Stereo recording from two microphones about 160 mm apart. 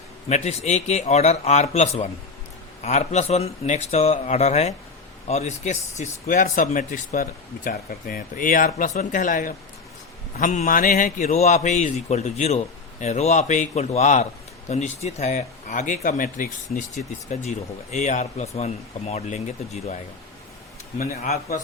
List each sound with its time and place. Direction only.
0.3 s a man's voice: 45° left (ahead or behind)